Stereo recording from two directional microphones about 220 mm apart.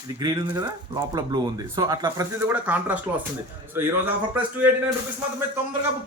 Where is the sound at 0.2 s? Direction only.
15° right (ahead or behind).